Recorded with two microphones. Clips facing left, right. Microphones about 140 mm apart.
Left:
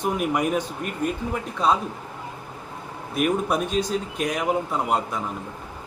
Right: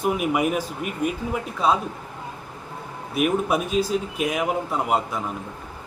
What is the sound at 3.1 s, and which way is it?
Speech, 5° right (ahead or behind).